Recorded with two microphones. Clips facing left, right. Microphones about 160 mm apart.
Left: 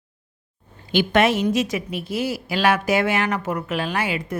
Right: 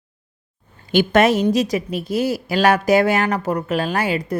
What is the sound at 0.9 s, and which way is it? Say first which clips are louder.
A man's voice: right 3 dB; 40° right (ahead or behind).